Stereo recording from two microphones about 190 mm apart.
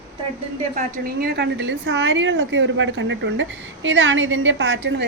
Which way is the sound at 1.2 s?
60° right (ahead or behind).